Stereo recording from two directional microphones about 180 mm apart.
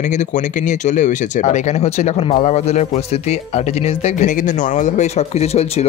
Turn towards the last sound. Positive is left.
turn(degrees=35)  # may be behind; listen again after turning